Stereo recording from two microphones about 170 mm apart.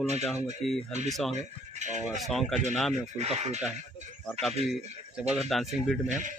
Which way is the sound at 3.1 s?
40° right (ahead or behind).